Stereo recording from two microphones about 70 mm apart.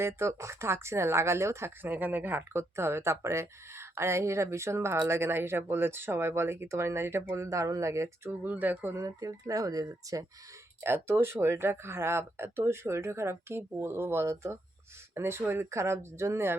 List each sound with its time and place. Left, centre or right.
0.0 s speech: right
8.4 s speech: right
9.0 s speech: right
10.8 s speech: right